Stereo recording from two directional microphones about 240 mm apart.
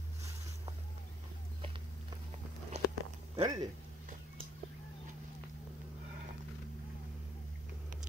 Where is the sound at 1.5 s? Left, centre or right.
Right.